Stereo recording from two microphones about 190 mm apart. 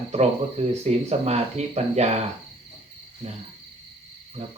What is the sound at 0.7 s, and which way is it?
Speech, 35° right (ahead or behind).